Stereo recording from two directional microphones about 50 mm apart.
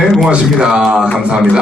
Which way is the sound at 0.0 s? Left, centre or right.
Centre.